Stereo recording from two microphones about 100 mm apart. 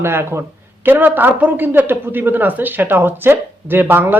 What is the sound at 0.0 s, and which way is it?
A woman's voice, 25° right (ahead or behind).